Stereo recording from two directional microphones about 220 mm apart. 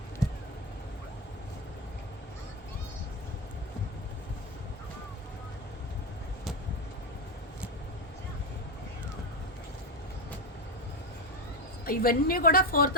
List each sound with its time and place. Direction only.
11.9 s a woman's voice: 40° left (ahead or behind)